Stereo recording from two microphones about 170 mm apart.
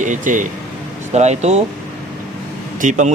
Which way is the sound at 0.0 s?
50° right (ahead or behind).